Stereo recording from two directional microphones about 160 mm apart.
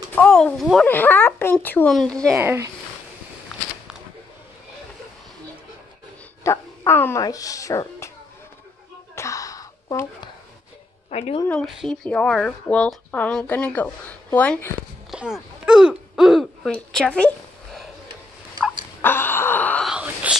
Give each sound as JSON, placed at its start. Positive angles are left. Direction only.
{"t": 0.1, "sound": "speech", "side_deg": 5}
{"t": 0.8, "sound": "a woman's voice", "side_deg": 10}
{"t": 2.3, "sound": "speech", "side_deg": -15}
{"t": 6.4, "sound": "speech", "side_deg": 20}
{"t": 9.1, "sound": "a sound", "side_deg": 20}
{"t": 11.1, "sound": "speech", "side_deg": 40}
{"t": 11.4, "sound": "speech", "side_deg": 5}
{"t": 15.0, "sound": "speech", "side_deg": 0}
{"t": 18.9, "sound": "wail", "side_deg": 15}
{"t": 19.9, "sound": "whispering", "side_deg": -5}